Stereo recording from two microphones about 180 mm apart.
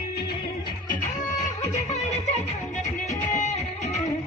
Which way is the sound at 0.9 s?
45° left (ahead or behind).